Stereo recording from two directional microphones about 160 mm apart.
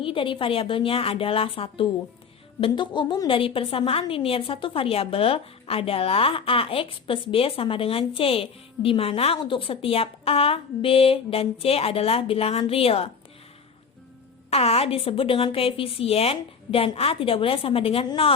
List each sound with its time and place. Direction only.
0.0 s a woman's voice: 35° left (ahead or behind)
14.5 s a woman's voice: 40° left (ahead or behind)